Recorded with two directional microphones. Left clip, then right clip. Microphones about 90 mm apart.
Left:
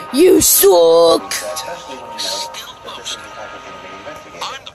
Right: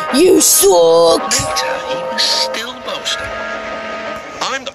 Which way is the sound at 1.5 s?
60° right (ahead or behind).